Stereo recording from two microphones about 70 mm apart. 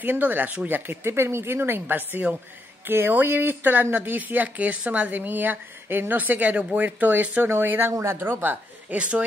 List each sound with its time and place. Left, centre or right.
0.0 s speech: right
1.0 s speech: right
7.9 s speech: right
8.9 s speech: centre